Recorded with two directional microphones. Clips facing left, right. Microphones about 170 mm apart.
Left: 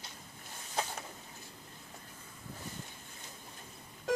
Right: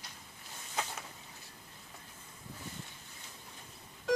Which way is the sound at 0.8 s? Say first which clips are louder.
Left 2 dB; 35° left (ahead or behind).